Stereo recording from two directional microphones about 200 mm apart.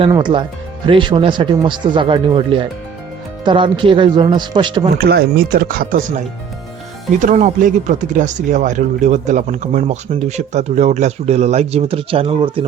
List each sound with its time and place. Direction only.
0.0 s speech: 25° right (ahead or behind)
4.9 s speech: 50° right (ahead or behind); by 12.6 s 25° right (ahead or behind)